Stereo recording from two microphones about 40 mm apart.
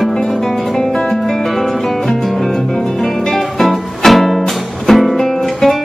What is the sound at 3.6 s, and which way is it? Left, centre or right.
Music, centre.